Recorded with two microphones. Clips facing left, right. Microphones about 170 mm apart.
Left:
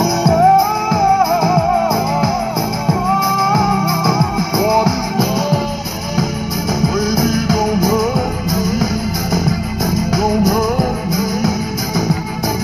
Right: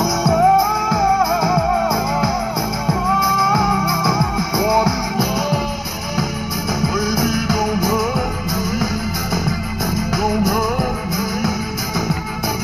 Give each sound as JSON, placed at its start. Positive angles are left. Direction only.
{"t": 0.2, "sound": "music", "side_deg": 40}
{"t": 4.1, "sound": "music", "side_deg": 35}
{"t": 7.0, "sound": "music", "side_deg": 40}
{"t": 10.1, "sound": "music", "side_deg": 40}